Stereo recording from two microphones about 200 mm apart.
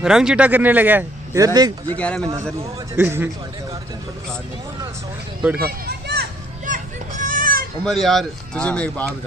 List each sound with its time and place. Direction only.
0.0 s speech: 5° right (ahead or behind); by 2.0 s 20° right (ahead or behind)
2.0 s speech: 5° left (ahead or behind)
3.0 s speech: 10° right (ahead or behind)
5.6 s children playing: 50° right (ahead or behind)
7.8 s speech: centre (ahead or behind)